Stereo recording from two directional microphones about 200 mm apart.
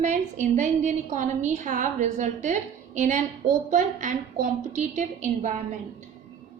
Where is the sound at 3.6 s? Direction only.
40° right (ahead or behind).